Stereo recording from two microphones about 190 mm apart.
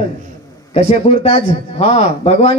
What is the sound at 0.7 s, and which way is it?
A man's voice, 30° left (ahead or behind).